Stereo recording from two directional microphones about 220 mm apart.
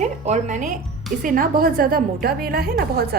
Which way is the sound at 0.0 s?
30° right (ahead or behind).